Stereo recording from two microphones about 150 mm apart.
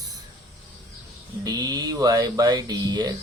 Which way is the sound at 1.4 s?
25° right (ahead or behind).